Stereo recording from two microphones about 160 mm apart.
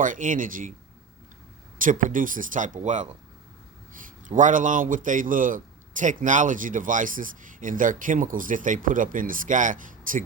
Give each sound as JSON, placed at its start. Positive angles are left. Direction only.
{"t": 0.0, "sound": "a man's voice", "side_deg": -55}
{"t": 1.8, "sound": "a man's voice", "side_deg": -55}